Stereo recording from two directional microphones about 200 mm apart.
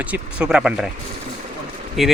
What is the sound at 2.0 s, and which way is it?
Speech, centre (ahead or behind).